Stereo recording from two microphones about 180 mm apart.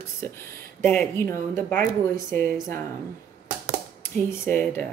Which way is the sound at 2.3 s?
50° right (ahead or behind).